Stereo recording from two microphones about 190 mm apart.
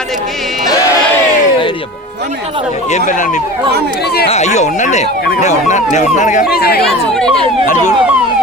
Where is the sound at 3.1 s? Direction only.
40° left (ahead or behind).